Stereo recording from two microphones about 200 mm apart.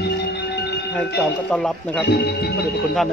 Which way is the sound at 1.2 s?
5° left (ahead or behind).